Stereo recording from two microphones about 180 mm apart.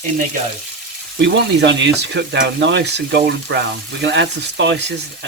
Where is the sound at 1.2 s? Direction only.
80° right.